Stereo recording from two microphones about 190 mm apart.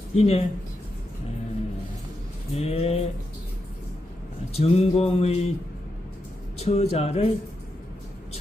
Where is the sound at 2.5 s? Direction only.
30° left (ahead or behind).